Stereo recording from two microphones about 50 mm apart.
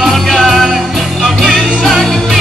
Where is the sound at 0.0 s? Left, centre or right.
Centre.